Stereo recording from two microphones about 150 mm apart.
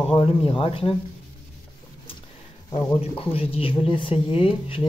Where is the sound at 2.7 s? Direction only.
40° left (ahead or behind).